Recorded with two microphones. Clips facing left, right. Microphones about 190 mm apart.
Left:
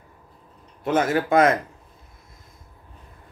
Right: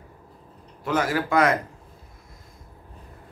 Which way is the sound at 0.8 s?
25° left (ahead or behind).